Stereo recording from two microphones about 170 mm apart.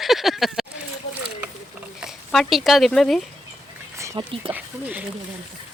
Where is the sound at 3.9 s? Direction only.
15° right (ahead or behind).